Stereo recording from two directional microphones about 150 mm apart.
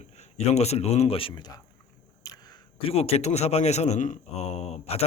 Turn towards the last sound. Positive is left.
turn(degrees=45)  # may be behind; listen again after turning